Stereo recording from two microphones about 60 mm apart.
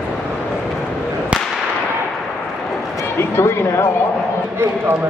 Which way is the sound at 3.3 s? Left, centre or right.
Left.